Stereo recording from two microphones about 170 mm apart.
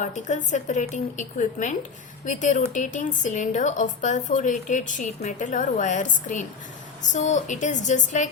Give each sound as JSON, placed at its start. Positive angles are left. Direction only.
{"t": 0.0, "sound": "a woman's voice", "side_deg": 45}